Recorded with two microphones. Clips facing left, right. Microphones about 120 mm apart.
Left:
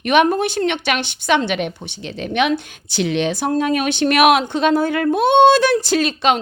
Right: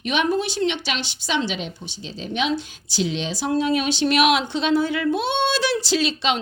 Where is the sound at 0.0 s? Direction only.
55° left (ahead or behind).